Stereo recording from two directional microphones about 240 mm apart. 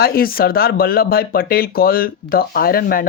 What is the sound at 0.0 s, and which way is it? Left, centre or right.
Speech, left.